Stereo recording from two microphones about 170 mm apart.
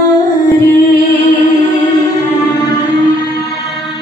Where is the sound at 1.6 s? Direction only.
20° left (ahead or behind).